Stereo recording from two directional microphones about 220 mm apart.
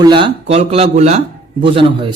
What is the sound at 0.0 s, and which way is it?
A man's voice, 20° right (ahead or behind).